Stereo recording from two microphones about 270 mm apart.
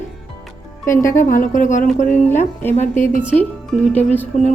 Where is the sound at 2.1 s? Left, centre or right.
Centre.